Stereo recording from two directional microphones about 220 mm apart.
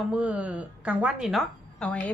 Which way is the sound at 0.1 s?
5° right (ahead or behind).